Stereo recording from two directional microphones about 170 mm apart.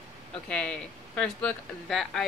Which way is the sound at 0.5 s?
5° left (ahead or behind).